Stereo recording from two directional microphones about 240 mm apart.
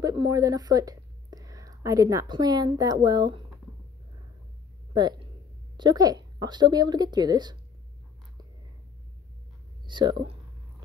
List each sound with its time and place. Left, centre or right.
0.0 s a woman's voice: centre
5.8 s speech: centre
9.8 s speech: centre